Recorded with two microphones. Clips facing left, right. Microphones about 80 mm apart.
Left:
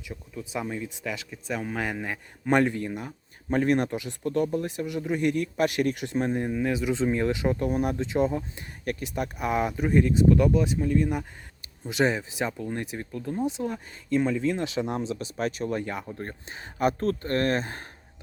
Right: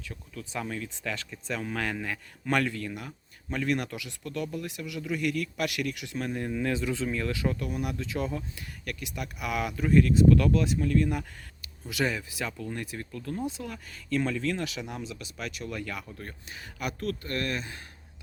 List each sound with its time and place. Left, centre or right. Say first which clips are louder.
0.1 s speech: left 5 dB; centre
7.0 s speech: left 5 dB; left